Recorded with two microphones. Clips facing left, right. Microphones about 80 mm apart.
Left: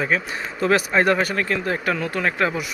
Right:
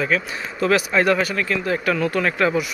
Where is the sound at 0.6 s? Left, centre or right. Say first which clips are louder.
Even; left.